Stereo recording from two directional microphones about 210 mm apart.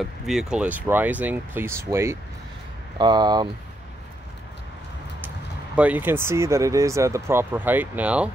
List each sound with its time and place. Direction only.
0.0 s speech: centre (ahead or behind); by 3.4 s 20° right (ahead or behind)
5.8 s speech: 5° right (ahead or behind)